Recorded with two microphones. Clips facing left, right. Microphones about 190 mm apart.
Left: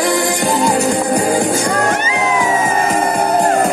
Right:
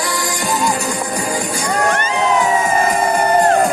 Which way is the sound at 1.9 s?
10° left (ahead or behind).